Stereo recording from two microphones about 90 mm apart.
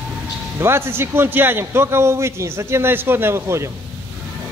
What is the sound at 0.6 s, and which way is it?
A man's voice, 25° right (ahead or behind).